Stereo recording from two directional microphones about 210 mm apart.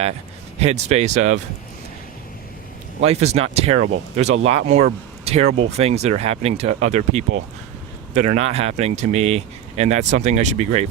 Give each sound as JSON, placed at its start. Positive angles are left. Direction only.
{"t": 0.6, "sound": "speech", "side_deg": -30}
{"t": 3.0, "sound": "speech", "side_deg": -30}